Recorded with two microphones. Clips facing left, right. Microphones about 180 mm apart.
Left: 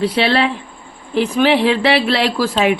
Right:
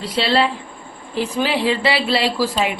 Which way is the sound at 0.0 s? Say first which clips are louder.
Left 3 dB; 65° left (ahead or behind).